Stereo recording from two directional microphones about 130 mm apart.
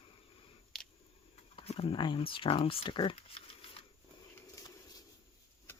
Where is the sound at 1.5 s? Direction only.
50° left (ahead or behind).